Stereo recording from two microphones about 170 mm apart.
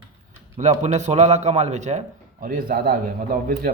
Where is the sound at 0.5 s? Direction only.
40° right (ahead or behind).